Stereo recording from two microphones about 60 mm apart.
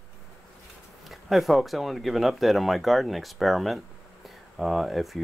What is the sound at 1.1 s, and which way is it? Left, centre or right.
Speech, centre.